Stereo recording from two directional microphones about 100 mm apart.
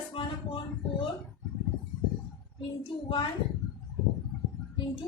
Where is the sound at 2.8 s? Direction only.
55° left (ahead or behind).